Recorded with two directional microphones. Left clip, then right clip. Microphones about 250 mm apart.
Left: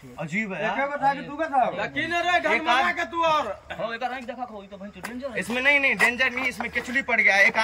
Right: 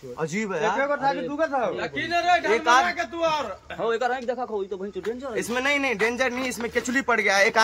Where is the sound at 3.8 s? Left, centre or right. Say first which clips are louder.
Right 6 dB; right.